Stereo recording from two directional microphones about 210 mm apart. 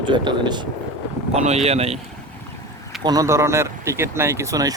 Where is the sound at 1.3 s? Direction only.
30° right (ahead or behind).